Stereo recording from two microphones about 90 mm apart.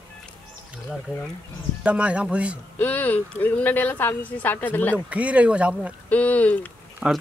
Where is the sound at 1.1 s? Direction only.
15° right (ahead or behind).